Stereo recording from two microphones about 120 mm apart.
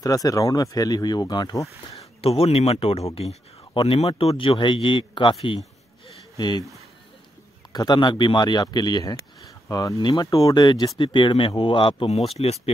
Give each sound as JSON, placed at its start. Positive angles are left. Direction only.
{"t": 0.0, "sound": "speech", "side_deg": 30}
{"t": 2.2, "sound": "speech", "side_deg": 55}
{"t": 7.7, "sound": "speech", "side_deg": 35}
{"t": 12.3, "sound": "speech", "side_deg": 60}